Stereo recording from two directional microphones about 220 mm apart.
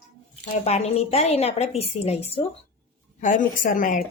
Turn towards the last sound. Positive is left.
turn(degrees=35)  # may be behind; listen again after turning